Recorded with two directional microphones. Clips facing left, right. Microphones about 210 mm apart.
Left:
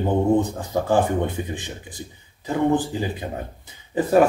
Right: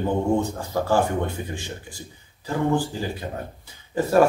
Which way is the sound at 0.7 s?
20° left (ahead or behind).